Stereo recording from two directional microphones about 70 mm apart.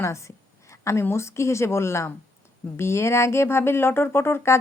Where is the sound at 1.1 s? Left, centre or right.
Left.